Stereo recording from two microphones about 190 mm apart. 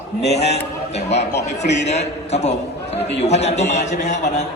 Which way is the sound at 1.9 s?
35° left (ahead or behind).